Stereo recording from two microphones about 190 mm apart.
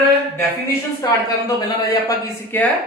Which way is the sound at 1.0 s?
20° left (ahead or behind).